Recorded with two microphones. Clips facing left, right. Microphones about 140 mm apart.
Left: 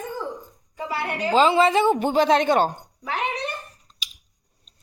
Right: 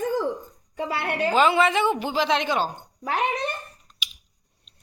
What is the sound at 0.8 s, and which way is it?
Speech, 65° right (ahead or behind).